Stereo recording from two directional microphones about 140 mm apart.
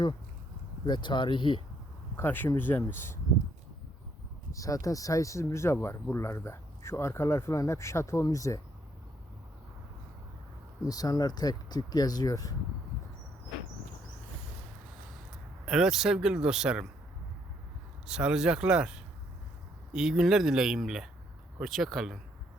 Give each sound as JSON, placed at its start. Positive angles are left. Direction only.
{"t": 0.9, "sound": "speech", "side_deg": 35}
{"t": 2.1, "sound": "speech", "side_deg": 15}
{"t": 4.5, "sound": "speech", "side_deg": 25}
{"t": 10.8, "sound": "speech", "side_deg": 25}
{"t": 15.6, "sound": "speech", "side_deg": -5}
{"t": 18.0, "sound": "speech", "side_deg": -5}